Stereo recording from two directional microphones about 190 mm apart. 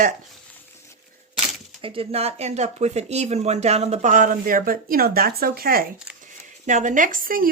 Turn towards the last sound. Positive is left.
turn(degrees=-50)  # may be behind; listen again after turning